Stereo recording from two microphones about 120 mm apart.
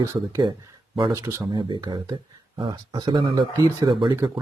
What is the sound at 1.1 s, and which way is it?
Speech, 25° right (ahead or behind).